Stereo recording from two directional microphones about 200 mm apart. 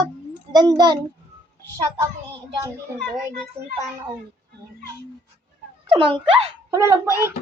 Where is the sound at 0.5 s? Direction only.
20° right (ahead or behind).